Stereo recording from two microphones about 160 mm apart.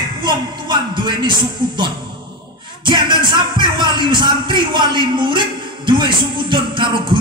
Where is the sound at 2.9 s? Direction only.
30° right (ahead or behind).